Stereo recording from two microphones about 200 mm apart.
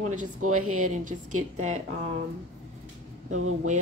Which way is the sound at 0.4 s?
90° right.